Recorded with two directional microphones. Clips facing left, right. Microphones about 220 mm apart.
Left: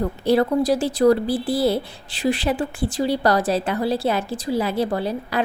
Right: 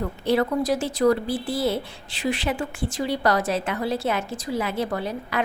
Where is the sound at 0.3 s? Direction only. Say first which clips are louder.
Left 4 dB; 35° left (ahead or behind).